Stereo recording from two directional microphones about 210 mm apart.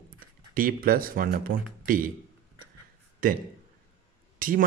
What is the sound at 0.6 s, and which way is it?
Speech, 40° right (ahead or behind).